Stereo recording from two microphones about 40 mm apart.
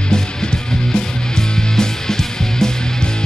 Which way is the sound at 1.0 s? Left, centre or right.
Centre.